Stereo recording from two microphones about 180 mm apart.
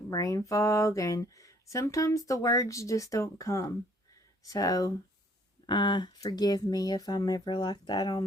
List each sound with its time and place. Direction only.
0.1 s speech: 20° left (ahead or behind)